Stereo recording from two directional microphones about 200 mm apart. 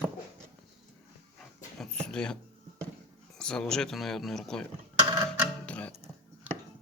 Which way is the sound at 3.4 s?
5° left (ahead or behind).